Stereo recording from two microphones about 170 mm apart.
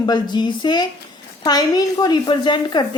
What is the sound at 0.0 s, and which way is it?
A woman's voice, 25° left (ahead or behind).